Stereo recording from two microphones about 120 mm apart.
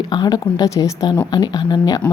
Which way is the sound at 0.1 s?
35° left (ahead or behind).